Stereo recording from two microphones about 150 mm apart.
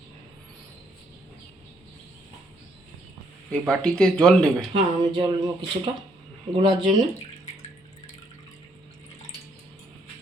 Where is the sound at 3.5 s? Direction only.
5° left (ahead or behind).